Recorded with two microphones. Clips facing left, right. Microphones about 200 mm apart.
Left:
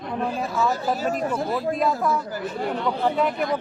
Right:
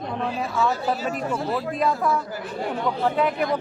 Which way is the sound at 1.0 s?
40° left (ahead or behind).